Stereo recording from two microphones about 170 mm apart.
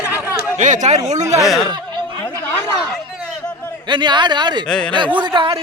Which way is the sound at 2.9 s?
5° left (ahead or behind).